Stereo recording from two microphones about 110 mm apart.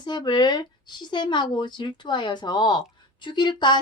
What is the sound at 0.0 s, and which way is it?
A woman's voice, 45° left (ahead or behind).